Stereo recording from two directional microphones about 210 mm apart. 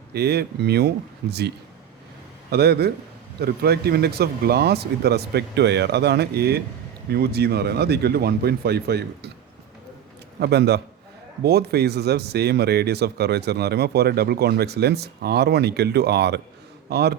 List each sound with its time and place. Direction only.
0.1 s speech: 50° right (ahead or behind)
10.4 s speech: 50° right (ahead or behind)